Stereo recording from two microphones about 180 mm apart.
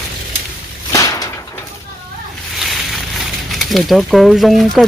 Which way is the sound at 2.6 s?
Centre (ahead or behind).